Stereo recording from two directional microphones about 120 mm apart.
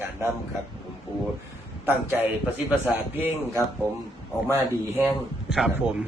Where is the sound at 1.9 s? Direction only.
15° right (ahead or behind).